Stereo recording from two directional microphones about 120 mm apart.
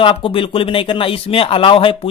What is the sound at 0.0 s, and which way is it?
Speech, 45° left (ahead or behind).